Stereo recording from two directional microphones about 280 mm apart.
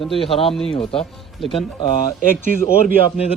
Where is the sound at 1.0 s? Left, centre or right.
Centre.